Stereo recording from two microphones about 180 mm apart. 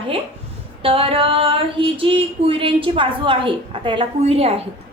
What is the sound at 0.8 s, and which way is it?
Female singing, 30° right (ahead or behind).